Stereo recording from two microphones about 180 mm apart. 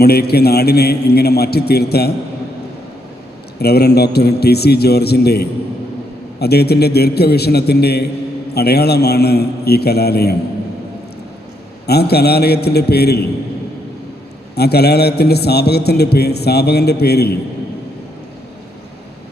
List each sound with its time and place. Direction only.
0.0 s a man's voice: 60° left (ahead or behind)
3.6 s a man's voice: 60° left (ahead or behind)
11.9 s a man's voice: 60° left (ahead or behind)
14.5 s a man's voice: 65° left (ahead or behind)